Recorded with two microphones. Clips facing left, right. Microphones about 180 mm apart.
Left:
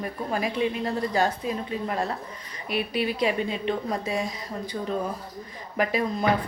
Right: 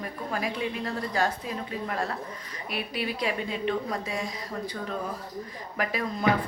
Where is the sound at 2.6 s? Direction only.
25° left (ahead or behind).